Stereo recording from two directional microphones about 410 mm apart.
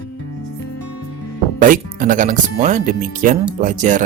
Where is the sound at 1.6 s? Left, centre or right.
Centre.